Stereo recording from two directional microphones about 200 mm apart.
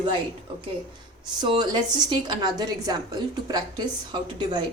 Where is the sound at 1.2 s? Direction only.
20° right (ahead or behind).